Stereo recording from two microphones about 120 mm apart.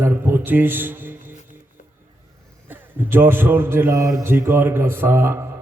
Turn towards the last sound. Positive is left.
turn(degrees=-20)  # may be behind; listen again after turning